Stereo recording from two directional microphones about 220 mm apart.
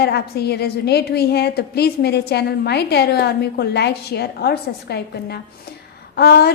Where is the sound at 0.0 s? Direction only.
50° left (ahead or behind).